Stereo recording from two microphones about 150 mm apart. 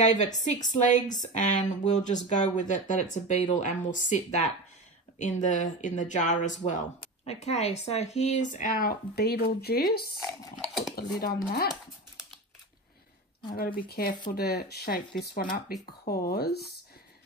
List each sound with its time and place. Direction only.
0.2 s a woman's voice: 55° left (ahead or behind)
7.0 s speech: 45° left (ahead or behind); by 10.0 s 90° left
10.6 s dishes: centre (ahead or behind)
11.0 s speech: 90° left
13.6 s speech: 80° left